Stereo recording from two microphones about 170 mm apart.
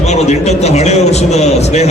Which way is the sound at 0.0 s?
40° left (ahead or behind).